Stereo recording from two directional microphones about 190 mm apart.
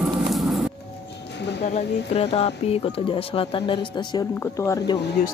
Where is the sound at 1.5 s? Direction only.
60° left (ahead or behind).